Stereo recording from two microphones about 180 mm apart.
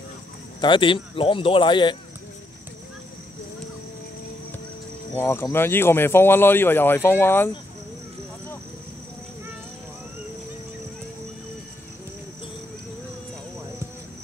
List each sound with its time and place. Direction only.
0.6 s speech: 30° left (ahead or behind)
5.1 s speech: 15° left (ahead or behind)